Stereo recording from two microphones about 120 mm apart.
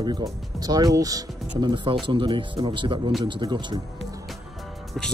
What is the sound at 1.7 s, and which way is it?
Speech, 45° right (ahead or behind).